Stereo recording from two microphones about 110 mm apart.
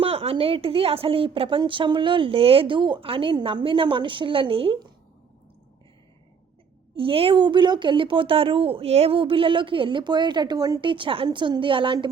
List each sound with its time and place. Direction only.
0.0 s a woman's voice: 60° right (ahead or behind)
6.9 s a woman's voice: 55° right (ahead or behind)